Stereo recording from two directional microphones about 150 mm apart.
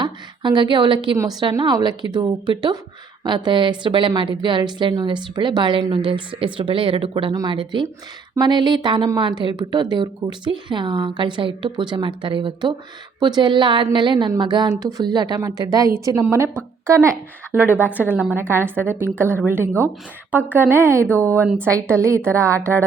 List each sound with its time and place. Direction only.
0.0 s a sound: 30° right (ahead or behind)
1.4 s a woman's voice: 30° right (ahead or behind)
21.4 s a woman's voice: 5° right (ahead or behind)
21.9 s speech: 20° right (ahead or behind)